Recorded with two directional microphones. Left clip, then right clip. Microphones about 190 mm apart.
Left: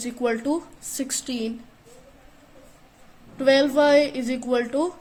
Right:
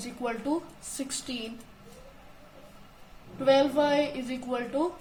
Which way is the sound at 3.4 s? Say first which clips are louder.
Left 5 dB; 50° left (ahead or behind).